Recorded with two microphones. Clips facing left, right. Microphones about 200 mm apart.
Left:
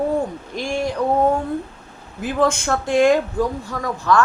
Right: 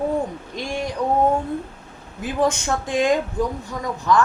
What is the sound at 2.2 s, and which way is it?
Speech, 15° right (ahead or behind).